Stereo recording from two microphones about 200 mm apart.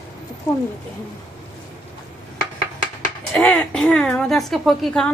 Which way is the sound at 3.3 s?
5° left (ahead or behind).